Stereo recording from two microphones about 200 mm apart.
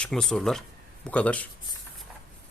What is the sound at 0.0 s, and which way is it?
Speech, 5° left (ahead or behind).